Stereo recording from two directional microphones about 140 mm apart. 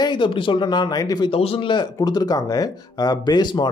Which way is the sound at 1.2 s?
40° left (ahead or behind).